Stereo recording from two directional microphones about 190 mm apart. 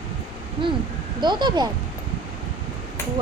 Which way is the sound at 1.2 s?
25° right (ahead or behind).